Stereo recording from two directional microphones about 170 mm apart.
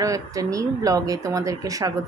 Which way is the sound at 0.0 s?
20° right (ahead or behind).